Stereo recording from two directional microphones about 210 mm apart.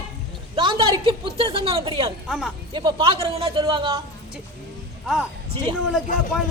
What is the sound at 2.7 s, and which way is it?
A woman's voice, 20° right (ahead or behind).